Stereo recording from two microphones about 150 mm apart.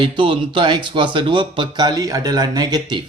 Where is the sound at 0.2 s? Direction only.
35° right (ahead or behind).